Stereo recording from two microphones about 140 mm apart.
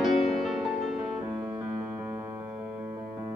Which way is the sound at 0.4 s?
Centre (ahead or behind).